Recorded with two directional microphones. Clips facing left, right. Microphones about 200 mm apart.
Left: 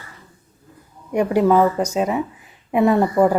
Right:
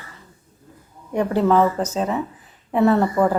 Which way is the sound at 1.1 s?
15° left (ahead or behind).